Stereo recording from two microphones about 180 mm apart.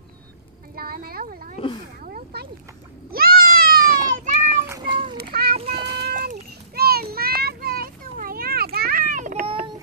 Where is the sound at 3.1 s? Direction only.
55° right (ahead or behind).